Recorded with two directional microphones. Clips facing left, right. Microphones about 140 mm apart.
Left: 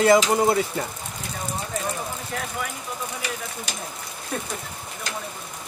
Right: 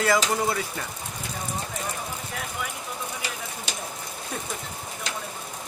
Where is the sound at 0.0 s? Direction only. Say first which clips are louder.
Left 6 dB; 25° left (ahead or behind).